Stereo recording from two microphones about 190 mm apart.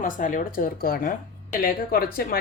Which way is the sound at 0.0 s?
45° left (ahead or behind).